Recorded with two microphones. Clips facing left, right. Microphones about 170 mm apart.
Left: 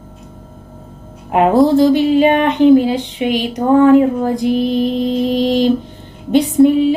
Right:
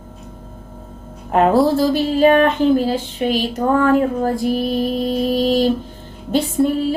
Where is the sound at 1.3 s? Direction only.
10° left (ahead or behind).